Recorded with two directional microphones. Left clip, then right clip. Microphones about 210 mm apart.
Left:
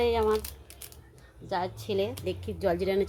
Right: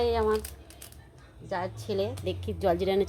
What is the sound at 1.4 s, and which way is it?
Speech, centre (ahead or behind).